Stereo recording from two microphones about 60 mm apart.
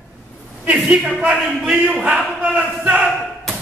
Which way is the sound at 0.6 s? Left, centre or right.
Right.